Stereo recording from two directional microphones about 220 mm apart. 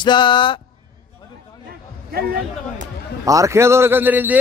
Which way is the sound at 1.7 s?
45° right (ahead or behind).